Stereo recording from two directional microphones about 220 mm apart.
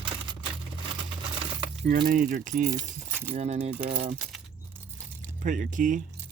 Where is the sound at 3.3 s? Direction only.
25° right (ahead or behind).